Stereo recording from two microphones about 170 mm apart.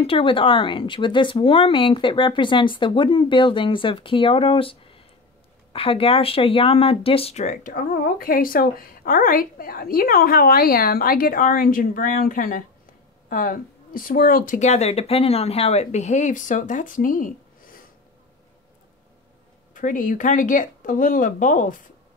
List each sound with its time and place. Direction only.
0.0 s speech: 30° left (ahead or behind); by 17.3 s 55° left (ahead or behind)
19.7 s speech: 50° left (ahead or behind)